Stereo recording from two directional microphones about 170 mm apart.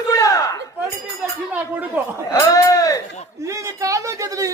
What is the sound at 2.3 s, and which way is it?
Sheep, 20° left (ahead or behind).